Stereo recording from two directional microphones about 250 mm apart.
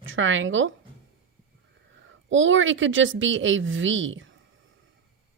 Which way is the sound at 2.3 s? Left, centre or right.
Right.